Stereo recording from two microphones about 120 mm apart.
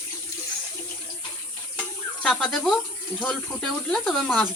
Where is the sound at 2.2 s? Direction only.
5° left (ahead or behind).